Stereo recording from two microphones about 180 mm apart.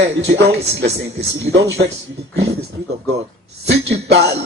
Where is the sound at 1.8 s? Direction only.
60° right (ahead or behind).